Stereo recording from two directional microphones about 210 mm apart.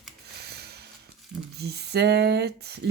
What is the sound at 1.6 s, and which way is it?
Speech, 50° right (ahead or behind).